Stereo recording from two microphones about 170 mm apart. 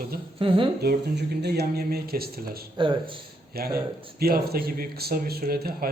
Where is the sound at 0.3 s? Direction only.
30° right (ahead or behind).